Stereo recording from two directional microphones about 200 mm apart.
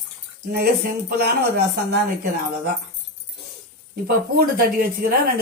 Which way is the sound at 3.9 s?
50° right (ahead or behind).